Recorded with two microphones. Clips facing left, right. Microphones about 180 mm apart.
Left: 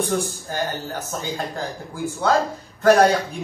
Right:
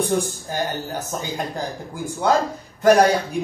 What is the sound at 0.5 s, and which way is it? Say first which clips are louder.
Speech: right 1 dB; 15° right (ahead or behind).